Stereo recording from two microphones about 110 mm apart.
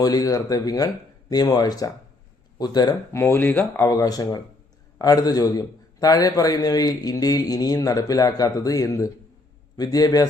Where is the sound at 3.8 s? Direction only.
30° left (ahead or behind).